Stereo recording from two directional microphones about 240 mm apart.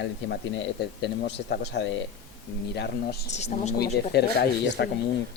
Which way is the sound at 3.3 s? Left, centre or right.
Left.